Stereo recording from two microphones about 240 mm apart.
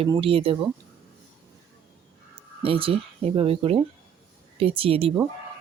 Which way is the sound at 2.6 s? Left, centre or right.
Right.